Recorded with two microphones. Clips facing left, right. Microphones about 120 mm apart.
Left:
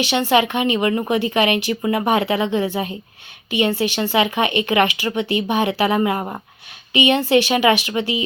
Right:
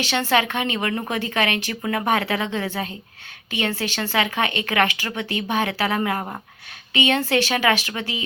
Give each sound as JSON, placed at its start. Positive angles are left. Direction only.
{"t": 0.0, "sound": "a woman's voice", "side_deg": 15}